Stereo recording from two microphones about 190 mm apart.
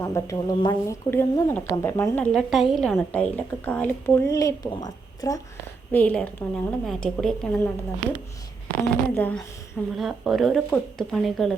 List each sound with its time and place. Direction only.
0.0 s a woman's voice: 15° left (ahead or behind)
5.9 s a woman's voice: 10° left (ahead or behind)
8.7 s a woman's voice: 10° left (ahead or behind)